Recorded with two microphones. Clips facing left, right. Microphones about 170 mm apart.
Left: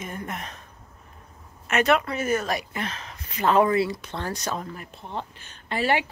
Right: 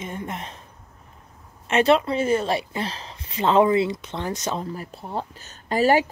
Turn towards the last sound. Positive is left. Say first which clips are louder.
# right 6 dB
turn(degrees=-40)  # may be behind; listen again after turning